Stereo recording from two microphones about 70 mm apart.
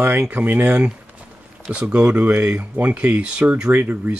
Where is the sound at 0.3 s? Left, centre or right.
Right.